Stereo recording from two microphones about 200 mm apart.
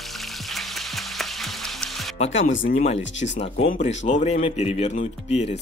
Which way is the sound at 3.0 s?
65° left (ahead or behind).